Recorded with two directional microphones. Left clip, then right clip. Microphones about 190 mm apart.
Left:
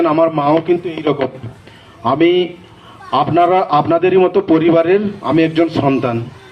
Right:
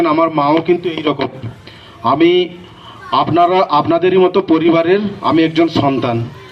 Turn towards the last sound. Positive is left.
turn(degrees=-30)  # may be behind; listen again after turning